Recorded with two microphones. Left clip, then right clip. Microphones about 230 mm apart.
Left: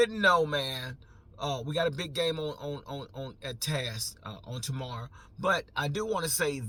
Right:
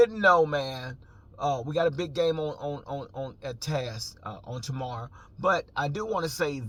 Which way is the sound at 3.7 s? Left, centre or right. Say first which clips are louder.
Right 1 dB; centre.